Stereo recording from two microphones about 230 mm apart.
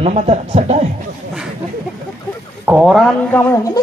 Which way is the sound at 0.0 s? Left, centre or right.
Right.